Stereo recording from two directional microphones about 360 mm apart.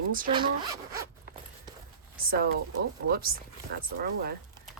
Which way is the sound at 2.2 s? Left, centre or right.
Right.